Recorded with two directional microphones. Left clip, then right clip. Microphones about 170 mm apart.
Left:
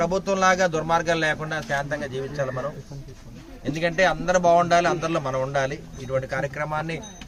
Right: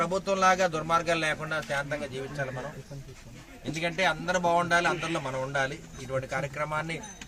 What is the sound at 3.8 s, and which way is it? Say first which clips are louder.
A man's voice: left 6 dB; centre (ahead or behind).